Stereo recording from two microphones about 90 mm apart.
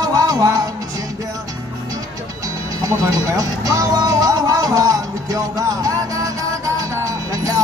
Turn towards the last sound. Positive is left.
turn(degrees=-40)  # may be behind; listen again after turning